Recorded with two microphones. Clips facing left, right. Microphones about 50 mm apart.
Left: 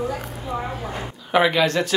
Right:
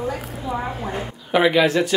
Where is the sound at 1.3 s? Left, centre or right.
Centre.